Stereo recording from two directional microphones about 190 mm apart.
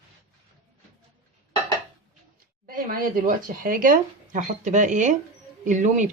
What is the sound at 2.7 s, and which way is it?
Speech, 50° right (ahead or behind).